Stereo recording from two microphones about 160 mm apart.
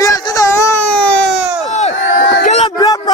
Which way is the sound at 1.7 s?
45° left (ahead or behind).